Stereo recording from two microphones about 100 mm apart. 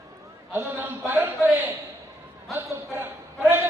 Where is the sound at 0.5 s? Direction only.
20° right (ahead or behind).